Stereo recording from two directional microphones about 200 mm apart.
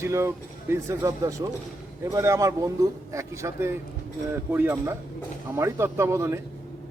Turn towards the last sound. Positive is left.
turn(degrees=-15)  # may be behind; listen again after turning